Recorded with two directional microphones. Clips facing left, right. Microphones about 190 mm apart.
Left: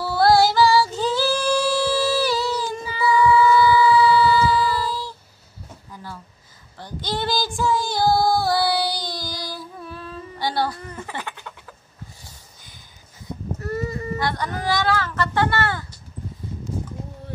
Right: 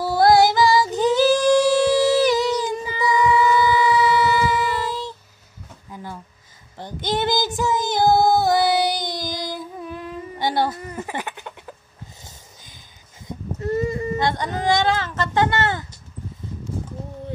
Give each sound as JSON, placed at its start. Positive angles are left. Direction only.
{"t": 0.0, "sound": "female singing", "side_deg": -20}
{"t": 6.8, "sound": "child singing", "side_deg": -20}
{"t": 12.2, "sound": "a sound", "side_deg": -20}